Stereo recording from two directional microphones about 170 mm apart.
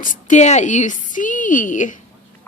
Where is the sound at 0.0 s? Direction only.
50° left (ahead or behind).